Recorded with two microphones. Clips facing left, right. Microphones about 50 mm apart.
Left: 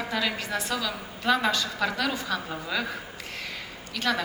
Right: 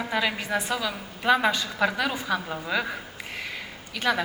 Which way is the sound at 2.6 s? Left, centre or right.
Centre.